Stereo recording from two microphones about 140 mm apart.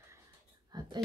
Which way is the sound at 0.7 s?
30° right (ahead or behind).